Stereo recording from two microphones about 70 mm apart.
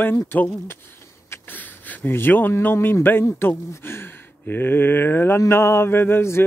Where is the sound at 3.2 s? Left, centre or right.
Left.